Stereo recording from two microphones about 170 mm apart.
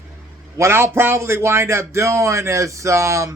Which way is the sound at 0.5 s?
15° right (ahead or behind).